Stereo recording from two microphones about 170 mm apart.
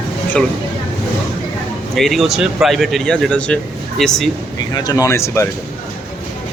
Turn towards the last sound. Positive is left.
turn(degrees=15)  # may be behind; listen again after turning